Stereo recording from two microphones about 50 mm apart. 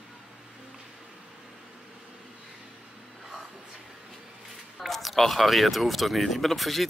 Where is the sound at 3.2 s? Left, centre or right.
Centre.